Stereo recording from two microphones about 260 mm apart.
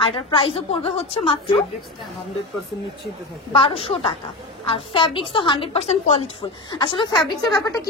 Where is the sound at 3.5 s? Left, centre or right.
Left.